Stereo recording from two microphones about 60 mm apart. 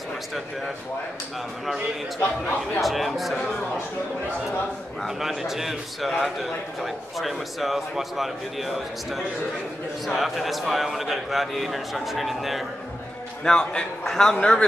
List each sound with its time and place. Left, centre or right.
2.1 s a man's voice: left
2.8 s a man's voice: centre
5.0 s a man's voice: centre
13.4 s a man's voice: centre